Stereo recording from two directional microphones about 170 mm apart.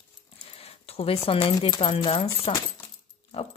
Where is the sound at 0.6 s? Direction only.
35° left (ahead or behind).